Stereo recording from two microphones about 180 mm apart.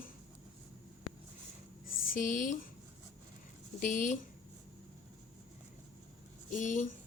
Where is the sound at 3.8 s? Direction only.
45° left (ahead or behind).